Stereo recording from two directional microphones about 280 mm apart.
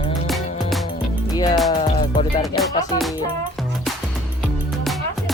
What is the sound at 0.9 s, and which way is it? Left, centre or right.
Music, centre.